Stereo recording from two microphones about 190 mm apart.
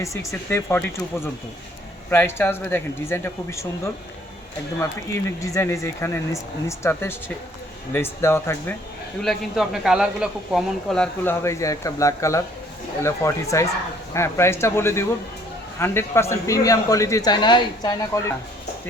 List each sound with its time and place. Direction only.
0.0 s speech: 15° left (ahead or behind)
5.4 s speech: 15° left (ahead or behind)
9.2 s speech: centre (ahead or behind); by 18.3 s 20° left (ahead or behind)